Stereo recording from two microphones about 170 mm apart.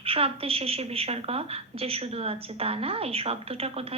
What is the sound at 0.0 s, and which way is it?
A woman's voice, 35° right (ahead or behind).